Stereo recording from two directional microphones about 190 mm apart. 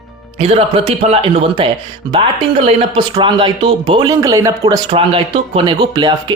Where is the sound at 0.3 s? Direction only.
30° right (ahead or behind).